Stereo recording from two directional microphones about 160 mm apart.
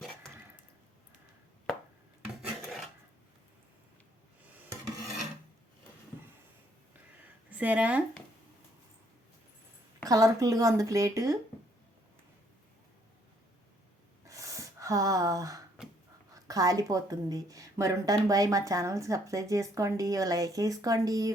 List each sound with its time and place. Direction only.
7.5 s speech: 10° right (ahead or behind)
10.1 s a woman's voice: 20° right (ahead or behind)
14.3 s a sound: 20° right (ahead or behind)
16.3 s a woman's voice: 20° right (ahead or behind)